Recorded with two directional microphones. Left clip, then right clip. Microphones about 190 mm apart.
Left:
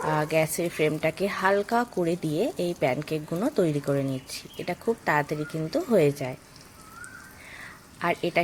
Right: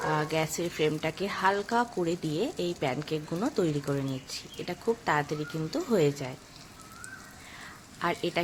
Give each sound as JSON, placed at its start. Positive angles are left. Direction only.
{"t": 0.1, "sound": "a woman's voice", "side_deg": 20}
{"t": 7.9, "sound": "speech", "side_deg": 15}